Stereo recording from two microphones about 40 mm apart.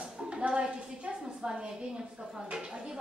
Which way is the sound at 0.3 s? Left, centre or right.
Right.